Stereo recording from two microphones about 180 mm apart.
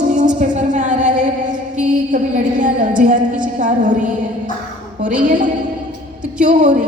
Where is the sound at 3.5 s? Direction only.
45° right (ahead or behind).